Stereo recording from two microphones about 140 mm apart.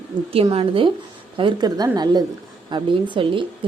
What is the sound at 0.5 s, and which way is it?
A woman's voice, 40° right (ahead or behind).